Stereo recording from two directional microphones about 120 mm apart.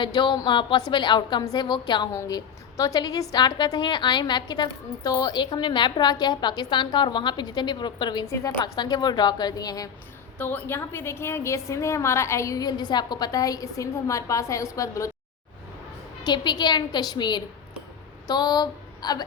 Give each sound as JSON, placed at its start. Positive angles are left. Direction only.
{"t": 0.0, "sound": "a woman's voice", "side_deg": 40}
{"t": 2.1, "sound": "a woman's voice", "side_deg": 25}
{"t": 10.3, "sound": "a woman's voice", "side_deg": 15}
{"t": 16.2, "sound": "a woman's voice", "side_deg": 40}